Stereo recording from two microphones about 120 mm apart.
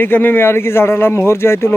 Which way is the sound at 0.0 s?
15° left (ahead or behind).